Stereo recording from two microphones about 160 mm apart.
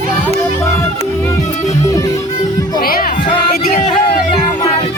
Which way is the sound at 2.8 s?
65° left (ahead or behind).